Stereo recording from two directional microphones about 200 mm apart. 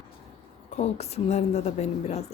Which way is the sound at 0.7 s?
35° left (ahead or behind).